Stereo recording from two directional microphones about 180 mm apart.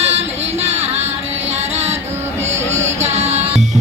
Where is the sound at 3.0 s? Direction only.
35° right (ahead or behind).